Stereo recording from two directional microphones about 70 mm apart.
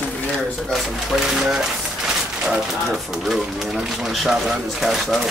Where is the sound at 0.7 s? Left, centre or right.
Centre.